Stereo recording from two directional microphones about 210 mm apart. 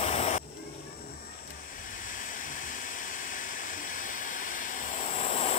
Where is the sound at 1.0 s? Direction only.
45° left (ahead or behind); by 5.5 s 30° left (ahead or behind).